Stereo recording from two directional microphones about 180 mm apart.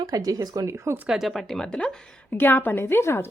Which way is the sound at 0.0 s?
20° right (ahead or behind).